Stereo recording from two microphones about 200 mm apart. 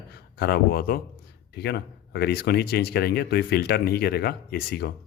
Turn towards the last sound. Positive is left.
turn(degrees=50)  # may be behind; listen again after turning